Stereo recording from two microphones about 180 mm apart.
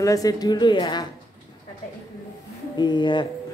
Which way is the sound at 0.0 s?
20° left (ahead or behind).